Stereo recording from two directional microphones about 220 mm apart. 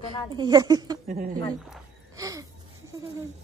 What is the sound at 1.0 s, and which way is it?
Speech, 40° right (ahead or behind).